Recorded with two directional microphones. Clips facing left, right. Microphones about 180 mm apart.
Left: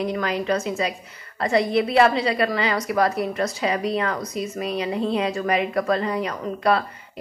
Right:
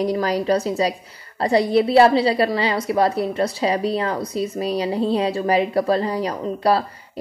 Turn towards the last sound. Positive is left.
turn(degrees=-35)  # may be behind; listen again after turning